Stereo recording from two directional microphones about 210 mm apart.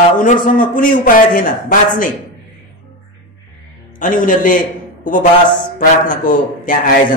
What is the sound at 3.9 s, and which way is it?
Speech, 40° left (ahead or behind).